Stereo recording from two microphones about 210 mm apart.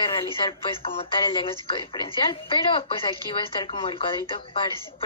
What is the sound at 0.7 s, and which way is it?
A woman's voice, 25° left (ahead or behind).